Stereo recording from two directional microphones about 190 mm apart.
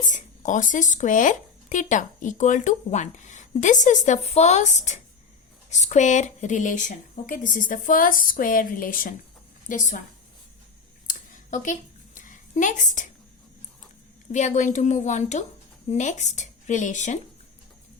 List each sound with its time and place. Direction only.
0.0 s speech: 40° left (ahead or behind)
11.0 s a sound: 45° left (ahead or behind)
14.3 s speech: 40° left (ahead or behind)